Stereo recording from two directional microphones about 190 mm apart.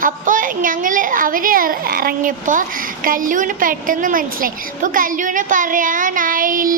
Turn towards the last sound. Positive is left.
turn(degrees=-45)  # may be behind; listen again after turning